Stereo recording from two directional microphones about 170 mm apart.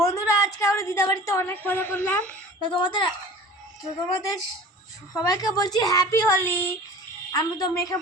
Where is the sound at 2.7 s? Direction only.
30° left (ahead or behind).